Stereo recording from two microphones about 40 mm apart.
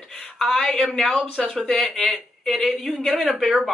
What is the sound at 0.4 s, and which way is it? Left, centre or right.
Speech, centre.